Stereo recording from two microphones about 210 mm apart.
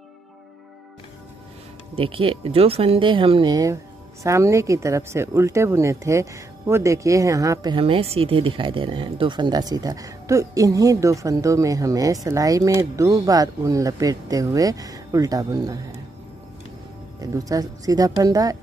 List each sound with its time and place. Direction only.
2.0 s speech: 25° right (ahead or behind)
17.2 s speech: 15° right (ahead or behind)